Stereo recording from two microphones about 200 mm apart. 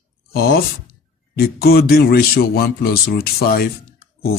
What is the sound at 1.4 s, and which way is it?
A man's voice, 50° left (ahead or behind).